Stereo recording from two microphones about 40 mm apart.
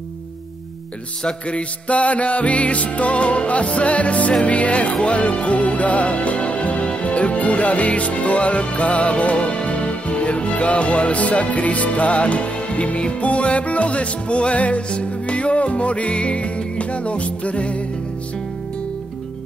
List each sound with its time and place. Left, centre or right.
1.2 s music: left